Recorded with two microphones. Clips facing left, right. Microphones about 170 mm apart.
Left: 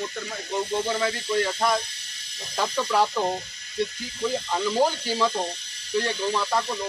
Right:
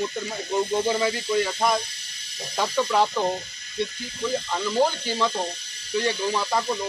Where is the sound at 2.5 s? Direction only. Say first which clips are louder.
Right 1 dB; centre (ahead or behind).